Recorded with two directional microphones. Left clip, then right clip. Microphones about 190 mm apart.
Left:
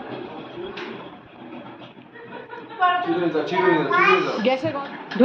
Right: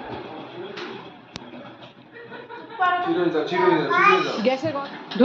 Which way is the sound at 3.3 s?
30° left (ahead or behind).